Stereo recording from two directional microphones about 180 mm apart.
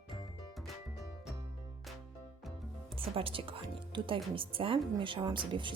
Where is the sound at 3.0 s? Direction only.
30° right (ahead or behind).